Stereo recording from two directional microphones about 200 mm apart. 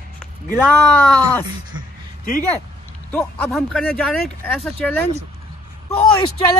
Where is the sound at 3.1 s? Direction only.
5° left (ahead or behind).